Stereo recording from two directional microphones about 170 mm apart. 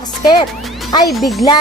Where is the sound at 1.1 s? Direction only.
Centre (ahead or behind).